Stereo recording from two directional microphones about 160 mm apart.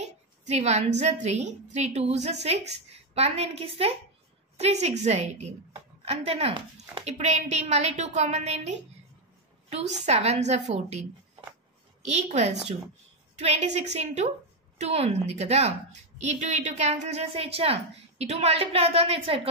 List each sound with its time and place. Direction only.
0.0 s a woman's voice: 45° right (ahead or behind)